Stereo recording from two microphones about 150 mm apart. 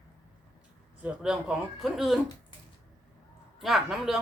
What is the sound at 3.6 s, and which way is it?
Speech, centre (ahead or behind).